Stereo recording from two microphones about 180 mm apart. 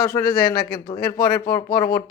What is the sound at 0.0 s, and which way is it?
Speech, 55° left (ahead or behind).